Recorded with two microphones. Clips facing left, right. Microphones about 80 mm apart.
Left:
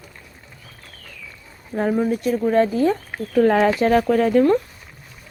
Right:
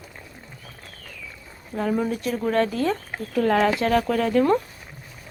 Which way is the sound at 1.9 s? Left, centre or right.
Centre.